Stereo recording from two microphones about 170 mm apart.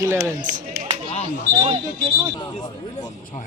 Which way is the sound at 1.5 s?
30° right (ahead or behind).